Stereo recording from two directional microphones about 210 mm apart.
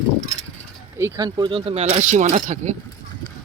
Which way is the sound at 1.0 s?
15° right (ahead or behind).